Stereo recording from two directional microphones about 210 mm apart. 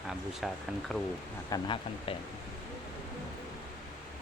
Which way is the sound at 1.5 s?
20° left (ahead or behind).